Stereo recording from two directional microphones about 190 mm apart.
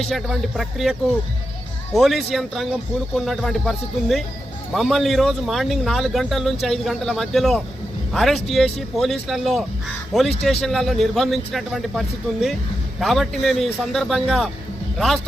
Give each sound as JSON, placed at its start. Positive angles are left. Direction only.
{"t": 0.1, "sound": "speech", "side_deg": 0}